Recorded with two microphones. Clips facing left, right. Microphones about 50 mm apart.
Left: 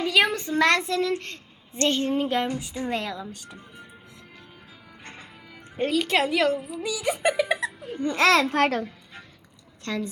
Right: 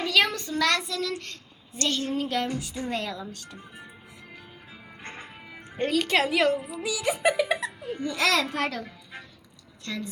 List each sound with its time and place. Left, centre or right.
0.0 s a woman's voice: centre
5.0 s music: right
5.7 s a woman's voice: centre
8.0 s a child's voice: left
9.8 s a woman's voice: left